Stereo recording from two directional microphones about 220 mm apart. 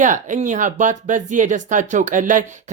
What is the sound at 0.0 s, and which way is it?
Speech, 35° right (ahead or behind).